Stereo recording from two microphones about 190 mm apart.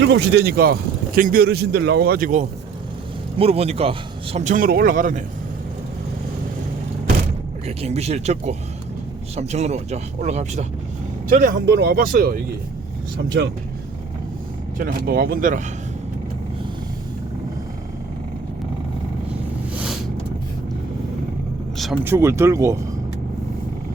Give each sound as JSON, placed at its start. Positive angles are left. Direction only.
{"t": 0.0, "sound": "speech", "side_deg": -65}
{"t": 3.3, "sound": "a man's voice", "side_deg": -30}
{"t": 7.8, "sound": "a man's voice", "side_deg": -35}
{"t": 11.3, "sound": "speech", "side_deg": -50}
{"t": 14.8, "sound": "speech", "side_deg": -50}
{"t": 22.0, "sound": "speech", "side_deg": -15}